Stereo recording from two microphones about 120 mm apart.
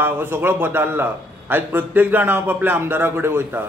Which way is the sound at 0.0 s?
20° right (ahead or behind).